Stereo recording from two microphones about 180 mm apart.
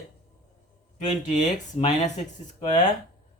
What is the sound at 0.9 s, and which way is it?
Speech, 40° left (ahead or behind).